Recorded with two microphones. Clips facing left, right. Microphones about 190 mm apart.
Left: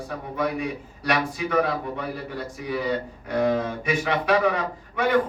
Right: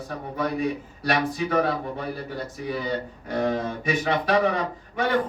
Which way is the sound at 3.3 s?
35° right (ahead or behind).